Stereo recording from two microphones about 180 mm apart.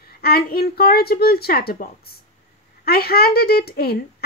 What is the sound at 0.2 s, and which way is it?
A woman's voice, 60° left (ahead or behind).